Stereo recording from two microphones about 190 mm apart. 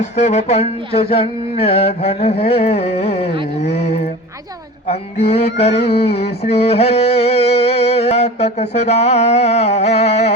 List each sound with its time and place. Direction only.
0.0 s mantra: 35° left (ahead or behind)